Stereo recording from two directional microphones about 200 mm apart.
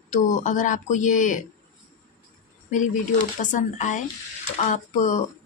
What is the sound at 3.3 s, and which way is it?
Speech, 40° left (ahead or behind).